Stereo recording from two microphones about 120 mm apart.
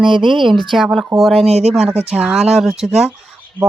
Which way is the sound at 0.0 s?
45° right (ahead or behind).